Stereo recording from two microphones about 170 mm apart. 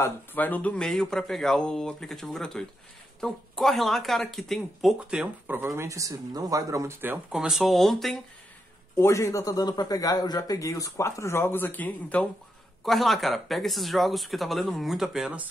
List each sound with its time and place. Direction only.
0.0 s speech: 10° left (ahead or behind)
8.9 s a man's voice: 15° left (ahead or behind); by 15.4 s 5° right (ahead or behind)